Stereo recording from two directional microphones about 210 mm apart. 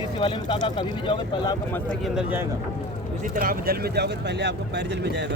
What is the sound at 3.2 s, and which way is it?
Speech, 40° right (ahead or behind).